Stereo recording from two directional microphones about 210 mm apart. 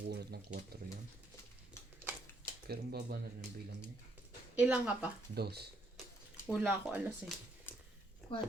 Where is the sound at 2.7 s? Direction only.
50° right (ahead or behind).